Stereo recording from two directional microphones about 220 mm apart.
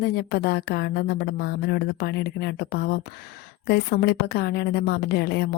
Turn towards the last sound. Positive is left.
turn(degrees=45)  # may be behind; listen again after turning